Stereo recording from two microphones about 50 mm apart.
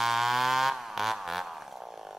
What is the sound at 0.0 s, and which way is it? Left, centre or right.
Chainsaw, centre.